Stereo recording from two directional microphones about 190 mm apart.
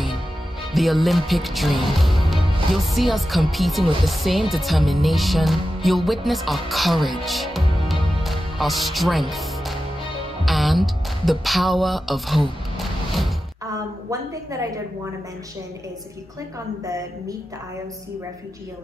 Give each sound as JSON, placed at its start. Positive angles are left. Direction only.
{"t": 0.7, "sound": "speech", "side_deg": 0}
{"t": 10.4, "sound": "music", "side_deg": 0}
{"t": 16.8, "sound": "speech", "side_deg": -15}